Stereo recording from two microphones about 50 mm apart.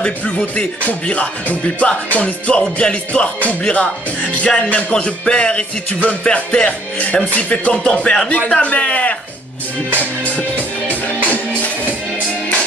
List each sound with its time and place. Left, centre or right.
0.6 s speech: left